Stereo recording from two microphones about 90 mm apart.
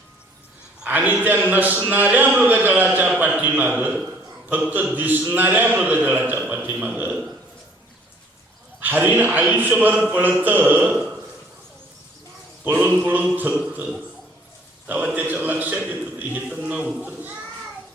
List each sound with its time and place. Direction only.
0.9 s a man's voice: 20° right (ahead or behind)
8.8 s a man's voice: 20° right (ahead or behind)
12.6 s a man's voice: 20° right (ahead or behind)
17.0 s children playing: 20° right (ahead or behind)